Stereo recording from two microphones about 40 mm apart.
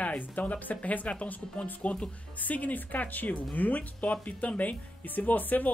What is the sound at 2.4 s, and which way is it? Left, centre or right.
Speech, left.